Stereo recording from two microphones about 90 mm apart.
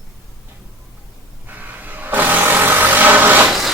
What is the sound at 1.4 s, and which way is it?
Vehicle, 20° right (ahead or behind).